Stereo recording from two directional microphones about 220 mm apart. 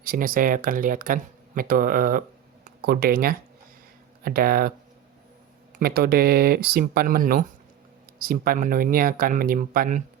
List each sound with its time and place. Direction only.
0.0 s speech: 40° right (ahead or behind)
5.7 s speech: 45° right (ahead or behind)